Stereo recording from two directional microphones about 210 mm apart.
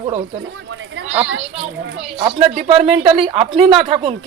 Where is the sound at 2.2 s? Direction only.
25° right (ahead or behind).